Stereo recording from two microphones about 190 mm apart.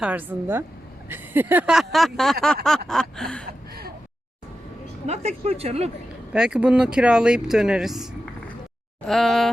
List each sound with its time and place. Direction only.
0.0 s a woman's voice: 10° right (ahead or behind)
5.0 s speech: 35° right (ahead or behind)
6.3 s speech: 5° right (ahead or behind)
9.0 s speech: centre (ahead or behind)